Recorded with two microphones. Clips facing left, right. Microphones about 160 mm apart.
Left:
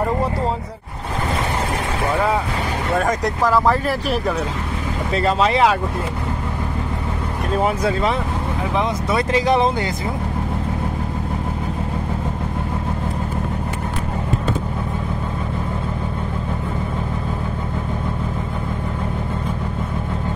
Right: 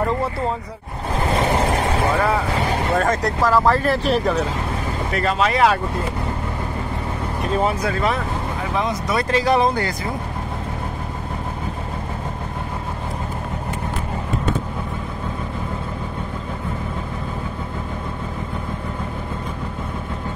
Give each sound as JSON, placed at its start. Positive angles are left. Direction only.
{"t": 2.9, "sound": "speech", "side_deg": 10}
{"t": 5.1, "sound": "speech", "side_deg": 25}
{"t": 8.7, "sound": "speech", "side_deg": 20}